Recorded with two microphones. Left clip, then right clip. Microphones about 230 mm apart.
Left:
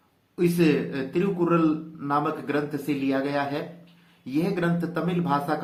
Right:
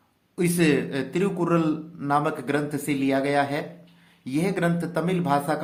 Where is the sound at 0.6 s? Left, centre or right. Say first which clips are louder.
Right 3 dB; right.